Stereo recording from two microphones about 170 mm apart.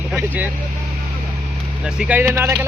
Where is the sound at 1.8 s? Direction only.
5° right (ahead or behind).